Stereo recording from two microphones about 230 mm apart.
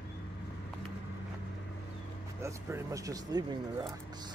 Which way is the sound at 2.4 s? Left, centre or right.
Centre.